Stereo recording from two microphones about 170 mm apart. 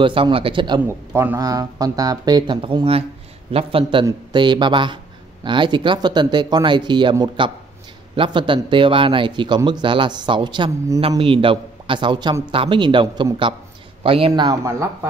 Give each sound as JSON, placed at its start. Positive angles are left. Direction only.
{"t": 0.0, "sound": "speech", "side_deg": -30}
{"t": 0.8, "sound": "a man's voice", "side_deg": -15}